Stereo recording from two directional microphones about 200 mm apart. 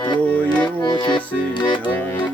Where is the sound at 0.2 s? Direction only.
5° left (ahead or behind).